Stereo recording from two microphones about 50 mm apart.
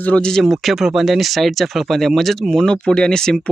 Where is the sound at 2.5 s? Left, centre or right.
Centre.